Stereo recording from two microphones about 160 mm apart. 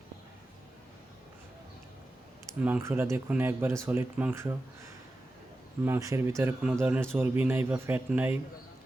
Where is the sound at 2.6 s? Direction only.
10° right (ahead or behind).